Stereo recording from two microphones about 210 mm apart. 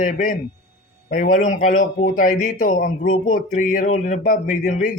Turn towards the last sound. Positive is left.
turn(degrees=40)  # may be behind; listen again after turning